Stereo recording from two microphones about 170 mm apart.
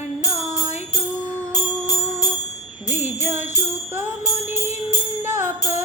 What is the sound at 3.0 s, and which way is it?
Jingle bell, 15° right (ahead or behind).